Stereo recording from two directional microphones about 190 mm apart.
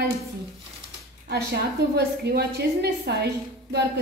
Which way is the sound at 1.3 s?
60° right (ahead or behind).